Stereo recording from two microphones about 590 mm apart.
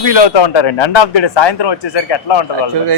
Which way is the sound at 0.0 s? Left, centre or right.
Left.